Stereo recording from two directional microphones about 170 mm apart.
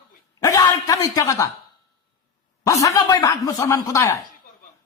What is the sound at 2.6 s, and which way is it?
A man's voice, 20° left (ahead or behind).